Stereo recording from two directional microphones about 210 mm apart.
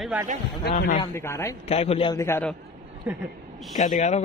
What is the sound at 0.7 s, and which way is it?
Speech, 45° left (ahead or behind).